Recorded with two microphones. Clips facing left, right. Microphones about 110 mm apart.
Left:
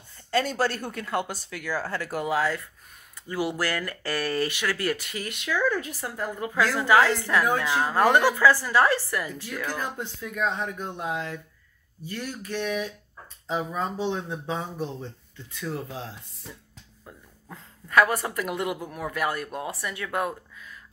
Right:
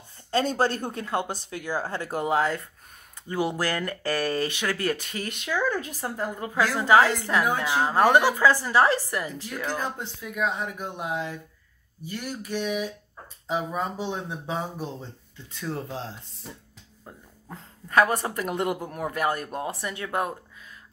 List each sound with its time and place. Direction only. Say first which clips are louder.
0.3 s a woman's voice: right 1 dB; 30° right (ahead or behind)
5.5 s a woman's voice: left 1 dB; 20° right (ahead or behind)
10.2 s speech: even; 5° right (ahead or behind)
15.7 s a woman's voice: right 2 dB; 30° right (ahead or behind)